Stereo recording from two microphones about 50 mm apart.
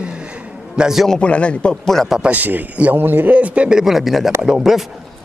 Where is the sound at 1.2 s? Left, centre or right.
Left.